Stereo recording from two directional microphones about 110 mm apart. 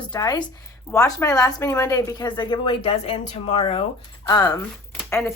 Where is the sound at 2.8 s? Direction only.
70° left (ahead or behind).